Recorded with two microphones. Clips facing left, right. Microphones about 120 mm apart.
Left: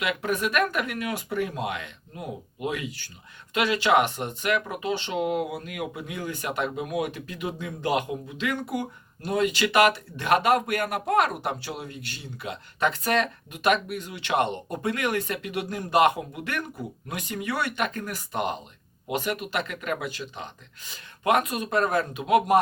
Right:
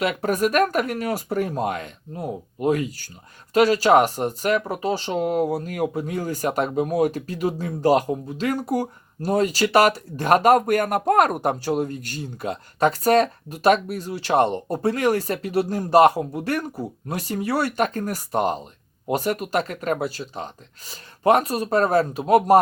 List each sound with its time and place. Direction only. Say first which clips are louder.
0.0 s speech: right 5 dB; 40° right (ahead or behind)